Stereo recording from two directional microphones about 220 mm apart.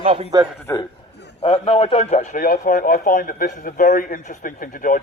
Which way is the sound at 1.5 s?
30° left (ahead or behind).